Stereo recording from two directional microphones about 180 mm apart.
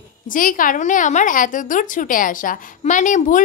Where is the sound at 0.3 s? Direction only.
50° left (ahead or behind).